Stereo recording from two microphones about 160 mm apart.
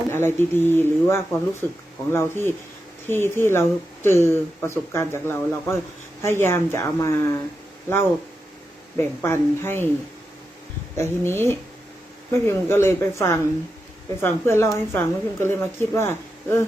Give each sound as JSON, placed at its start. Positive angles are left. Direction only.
{"t": 0.1, "sound": "speech", "side_deg": 15}
{"t": 9.0, "sound": "speech", "side_deg": 15}
{"t": 10.9, "sound": "speech", "side_deg": 15}